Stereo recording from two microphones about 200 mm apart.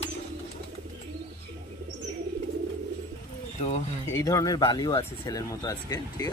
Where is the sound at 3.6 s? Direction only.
35° left (ahead or behind).